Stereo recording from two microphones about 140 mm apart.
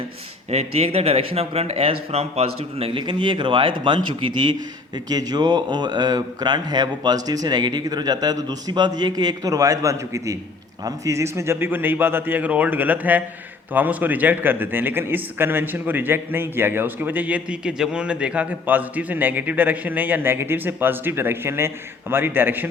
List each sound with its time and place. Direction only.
0.5 s speech: 45° right (ahead or behind)
5.0 s a man's voice: 30° right (ahead or behind)